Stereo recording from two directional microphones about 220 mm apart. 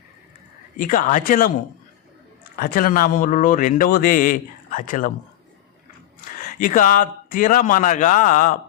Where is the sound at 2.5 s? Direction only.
40° left (ahead or behind).